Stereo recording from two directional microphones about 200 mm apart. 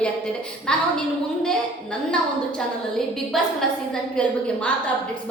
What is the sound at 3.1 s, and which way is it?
A woman's voice, centre (ahead or behind).